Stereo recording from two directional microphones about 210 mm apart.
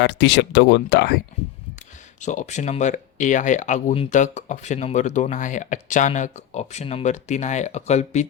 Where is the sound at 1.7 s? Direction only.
35° left (ahead or behind).